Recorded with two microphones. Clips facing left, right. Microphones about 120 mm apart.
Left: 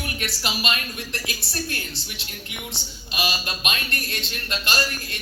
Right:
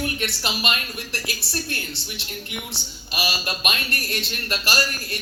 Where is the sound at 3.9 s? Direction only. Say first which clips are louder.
Right 2 dB; 30° left (ahead or behind).